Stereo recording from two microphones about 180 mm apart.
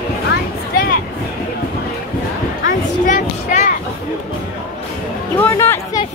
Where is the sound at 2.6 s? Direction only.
45° left (ahead or behind).